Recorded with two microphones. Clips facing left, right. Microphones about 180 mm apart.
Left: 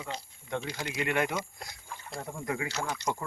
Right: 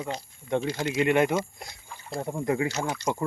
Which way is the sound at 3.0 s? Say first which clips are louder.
Right 4 dB; 20° left (ahead or behind).